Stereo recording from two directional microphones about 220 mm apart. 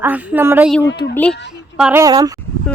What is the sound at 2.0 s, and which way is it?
Speech, 15° right (ahead or behind).